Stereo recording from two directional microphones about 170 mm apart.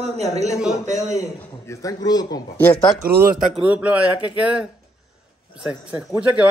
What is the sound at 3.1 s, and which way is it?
Speech, 55° right (ahead or behind).